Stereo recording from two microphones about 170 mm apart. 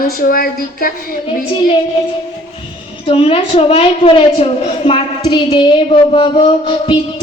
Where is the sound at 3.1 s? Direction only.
35° left (ahead or behind).